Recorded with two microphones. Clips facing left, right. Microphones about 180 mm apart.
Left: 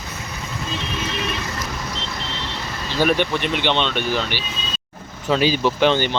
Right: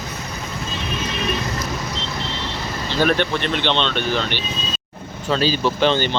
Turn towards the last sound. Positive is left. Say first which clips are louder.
# left 1 dB
turn(degrees=10)  # may be behind; listen again after turning